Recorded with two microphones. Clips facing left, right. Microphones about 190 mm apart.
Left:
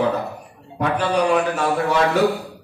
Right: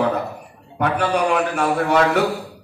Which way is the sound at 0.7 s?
60° right (ahead or behind).